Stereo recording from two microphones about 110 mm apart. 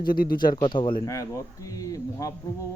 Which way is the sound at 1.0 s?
30° left (ahead or behind).